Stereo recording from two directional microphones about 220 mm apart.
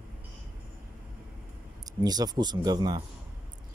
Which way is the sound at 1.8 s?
15° right (ahead or behind).